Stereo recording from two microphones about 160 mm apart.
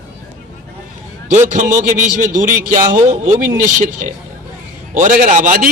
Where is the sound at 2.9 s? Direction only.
50° right (ahead or behind).